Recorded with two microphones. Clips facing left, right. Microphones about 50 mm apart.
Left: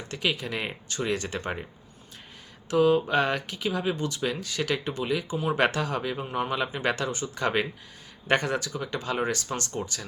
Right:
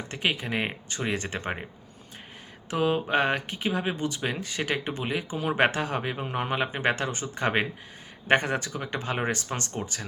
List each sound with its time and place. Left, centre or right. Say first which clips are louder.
0.1 s speech: even; right
2.6 s speech: left 4 dB; right